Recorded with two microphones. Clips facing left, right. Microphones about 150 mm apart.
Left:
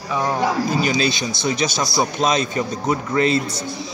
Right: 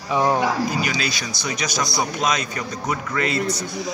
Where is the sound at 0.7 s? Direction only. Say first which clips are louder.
Left 5 dB; 30° left (ahead or behind).